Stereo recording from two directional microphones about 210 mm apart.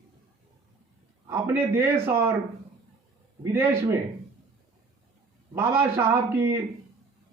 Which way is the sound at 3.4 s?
10° right (ahead or behind).